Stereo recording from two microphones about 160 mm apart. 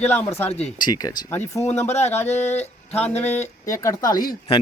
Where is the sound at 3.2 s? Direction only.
15° left (ahead or behind).